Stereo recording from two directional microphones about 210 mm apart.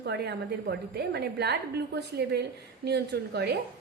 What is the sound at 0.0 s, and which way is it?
A woman's voice, 50° right (ahead or behind).